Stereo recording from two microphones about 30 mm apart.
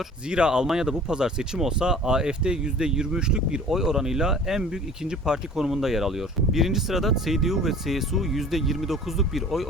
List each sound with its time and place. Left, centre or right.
0.3 s speech: right
3.7 s speech: centre
5.5 s speech: centre